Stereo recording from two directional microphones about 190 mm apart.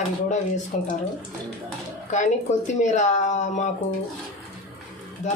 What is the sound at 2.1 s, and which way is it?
Speech, 40° left (ahead or behind).